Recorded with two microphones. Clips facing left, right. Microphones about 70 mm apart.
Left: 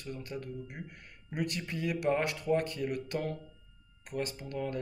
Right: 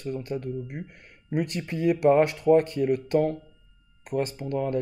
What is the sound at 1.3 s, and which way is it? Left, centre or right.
Speech, right.